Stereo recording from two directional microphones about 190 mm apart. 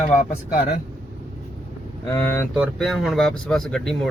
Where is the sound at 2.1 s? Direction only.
15° left (ahead or behind).